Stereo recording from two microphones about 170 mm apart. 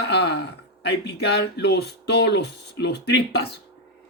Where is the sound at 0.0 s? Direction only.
75° left (ahead or behind).